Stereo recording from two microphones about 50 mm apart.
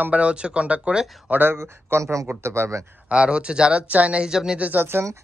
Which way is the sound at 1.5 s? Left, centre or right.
Right.